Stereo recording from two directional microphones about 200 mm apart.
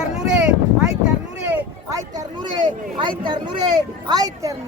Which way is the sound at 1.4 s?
10° right (ahead or behind).